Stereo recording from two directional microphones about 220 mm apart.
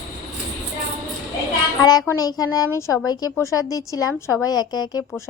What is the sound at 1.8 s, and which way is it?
A woman's voice, 15° left (ahead or behind).